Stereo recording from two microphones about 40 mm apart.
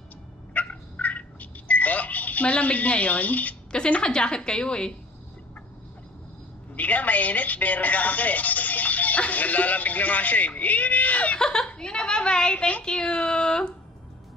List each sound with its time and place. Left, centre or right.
0.5 s a sound: left
4.0 s speech: left
6.7 s speech: left
11.3 s a woman's voice: centre